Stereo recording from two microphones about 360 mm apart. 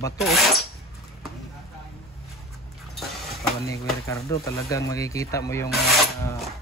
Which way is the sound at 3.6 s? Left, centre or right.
Centre.